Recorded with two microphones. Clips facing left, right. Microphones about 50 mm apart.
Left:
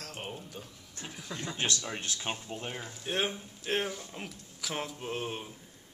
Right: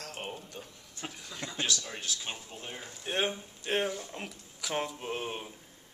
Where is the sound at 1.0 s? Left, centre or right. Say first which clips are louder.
Right 3 dB; right.